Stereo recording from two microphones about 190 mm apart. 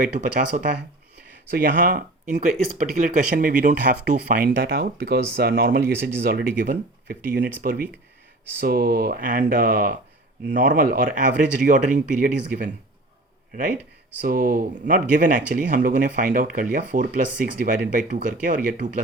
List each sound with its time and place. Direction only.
0.0 s speech: 40° right (ahead or behind)
14.2 s speech: 45° right (ahead or behind)